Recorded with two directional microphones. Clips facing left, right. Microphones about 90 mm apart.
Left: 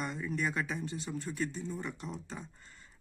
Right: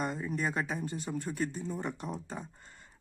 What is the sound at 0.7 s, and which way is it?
Speech, 50° right (ahead or behind).